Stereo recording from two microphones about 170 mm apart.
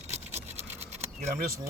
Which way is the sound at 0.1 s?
40° right (ahead or behind).